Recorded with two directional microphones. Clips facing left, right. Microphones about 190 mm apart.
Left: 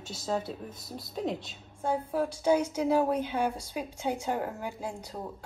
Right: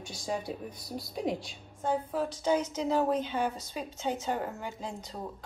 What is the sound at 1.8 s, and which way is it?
Speech, 10° left (ahead or behind).